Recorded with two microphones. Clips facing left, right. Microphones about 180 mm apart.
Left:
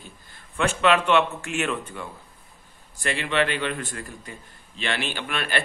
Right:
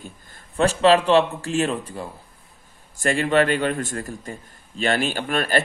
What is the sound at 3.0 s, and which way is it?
A man's voice, 45° right (ahead or behind).